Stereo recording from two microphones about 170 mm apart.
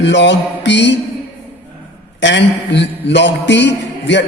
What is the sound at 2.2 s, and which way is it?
A man's voice, 90° left.